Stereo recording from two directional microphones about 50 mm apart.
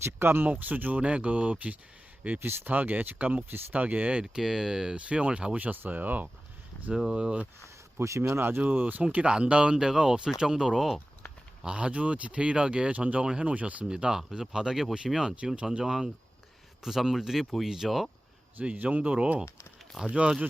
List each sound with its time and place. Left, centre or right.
0.0 s speech: right
0.4 s speech: right
2.4 s speech: right
4.2 s speech: centre
4.9 s speech: right
5.5 s speech: right
6.9 s speech: centre
8.0 s speech: right
8.6 s speech: right
9.1 s speech: right
11.6 s speech: right
13.8 s speech: centre
18.6 s speech: right